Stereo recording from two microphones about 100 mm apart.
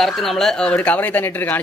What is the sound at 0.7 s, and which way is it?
Speech, 15° left (ahead or behind).